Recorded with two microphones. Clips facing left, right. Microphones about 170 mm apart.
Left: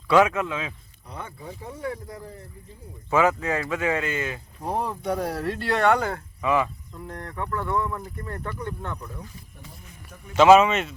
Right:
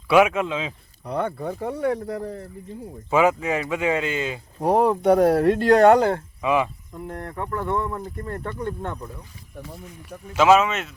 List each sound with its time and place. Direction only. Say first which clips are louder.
0.1 s speech: right 2 dB; 10° right (ahead or behind)
1.0 s speech: right 12 dB; 65° right (ahead or behind)
3.1 s speech: right 2 dB; 15° right (ahead or behind)
4.6 s speech: right 10 dB; 65° right (ahead or behind); by 6.2 s 30° right (ahead or behind)
6.4 s speech: right 1 dB; 15° right (ahead or behind)
10.3 s speech: left 2 dB; centre (ahead or behind)